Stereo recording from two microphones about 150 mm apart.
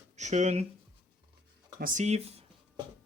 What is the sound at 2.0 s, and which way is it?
Speech, 45° right (ahead or behind).